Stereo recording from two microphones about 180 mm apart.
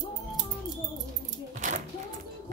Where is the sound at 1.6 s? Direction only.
40° right (ahead or behind).